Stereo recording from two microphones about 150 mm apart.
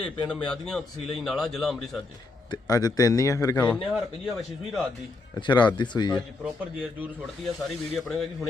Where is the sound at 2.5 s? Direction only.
25° left (ahead or behind).